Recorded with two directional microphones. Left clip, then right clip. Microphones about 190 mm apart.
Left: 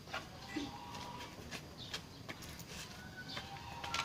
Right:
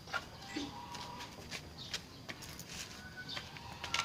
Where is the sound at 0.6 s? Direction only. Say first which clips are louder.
Right 1 dB; centre (ahead or behind).